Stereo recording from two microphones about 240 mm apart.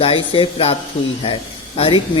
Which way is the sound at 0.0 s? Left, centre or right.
Left.